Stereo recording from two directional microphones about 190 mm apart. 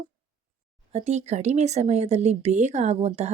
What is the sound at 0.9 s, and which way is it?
Speech, 35° right (ahead or behind).